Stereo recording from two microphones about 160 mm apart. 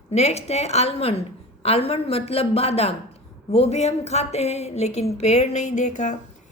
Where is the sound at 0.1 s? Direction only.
45° left (ahead or behind).